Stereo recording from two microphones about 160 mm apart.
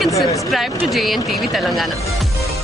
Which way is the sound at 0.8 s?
Centre (ahead or behind).